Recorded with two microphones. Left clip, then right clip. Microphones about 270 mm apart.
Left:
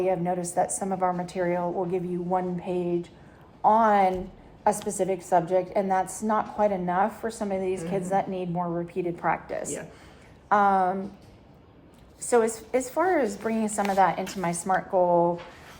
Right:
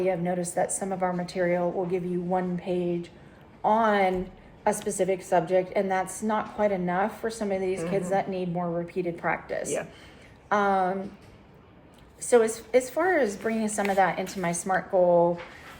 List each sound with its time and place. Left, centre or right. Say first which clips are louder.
0.0 s a woman's voice: left 1 dB; left
12.3 s a woman's voice: right 2 dB; centre